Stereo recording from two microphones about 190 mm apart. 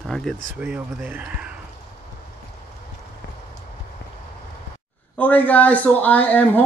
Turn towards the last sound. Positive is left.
turn(degrees=10)  # may be behind; listen again after turning